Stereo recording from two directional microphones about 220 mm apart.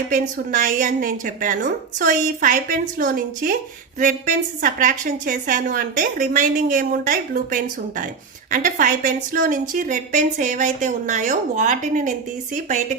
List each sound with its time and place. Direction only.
0.1 s a woman's voice: 35° right (ahead or behind)